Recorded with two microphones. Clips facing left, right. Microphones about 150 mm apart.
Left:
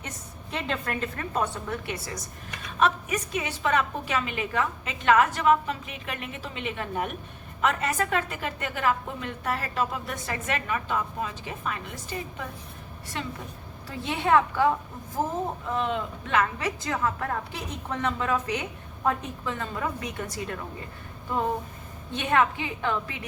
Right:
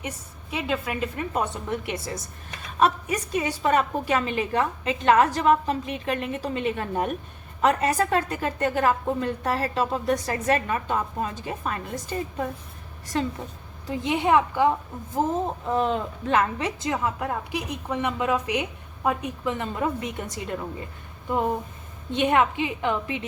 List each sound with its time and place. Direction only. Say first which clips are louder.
0.5 s a woman's voice: right 3 dB; 10° right (ahead or behind)
3.3 s a woman's voice: right 4 dB; 35° right (ahead or behind)
13.8 s a woman's voice: right 4 dB; 20° right (ahead or behind)
15.7 s a woman's voice: right 5 dB; 40° right (ahead or behind); by 20.6 s 20° right (ahead or behind)
21.2 s a sound: right 3 dB; 20° right (ahead or behind)
22.1 s a woman's voice: right 3 dB; 20° right (ahead or behind)